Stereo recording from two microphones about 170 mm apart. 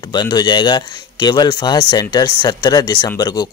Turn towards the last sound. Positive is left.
turn(degrees=25)  # may be behind; listen again after turning